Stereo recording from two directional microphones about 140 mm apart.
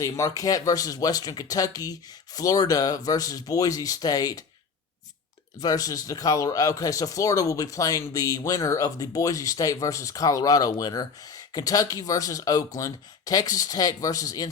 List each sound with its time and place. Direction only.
0.0 s speech: 25° left (ahead or behind)
5.5 s speech: 25° left (ahead or behind)